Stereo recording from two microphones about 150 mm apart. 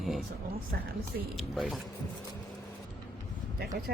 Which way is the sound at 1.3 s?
Centre (ahead or behind).